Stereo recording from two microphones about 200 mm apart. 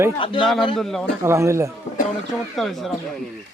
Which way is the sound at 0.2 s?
25° left (ahead or behind).